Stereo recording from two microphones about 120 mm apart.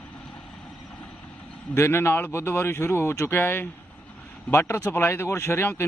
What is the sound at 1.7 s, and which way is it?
Speech, 20° left (ahead or behind).